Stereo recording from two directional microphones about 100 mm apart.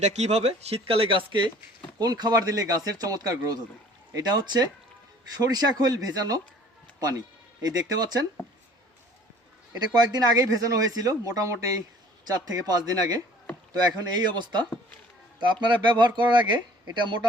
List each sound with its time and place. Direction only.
0.2 s speech: 90° right; by 1.5 s 55° right (ahead or behind)
2.0 s speech: 45° right (ahead or behind)
7.6 s speech: 40° right (ahead or behind)
9.7 s speech: 40° right (ahead or behind)